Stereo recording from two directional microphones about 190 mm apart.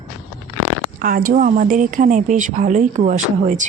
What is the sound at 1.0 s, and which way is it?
Speech, 50° right (ahead or behind).